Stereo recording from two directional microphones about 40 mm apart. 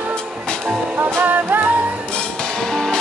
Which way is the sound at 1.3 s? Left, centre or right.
Right.